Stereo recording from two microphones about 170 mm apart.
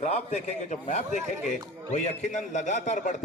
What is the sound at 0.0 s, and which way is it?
A man's voice, 40° left (ahead or behind).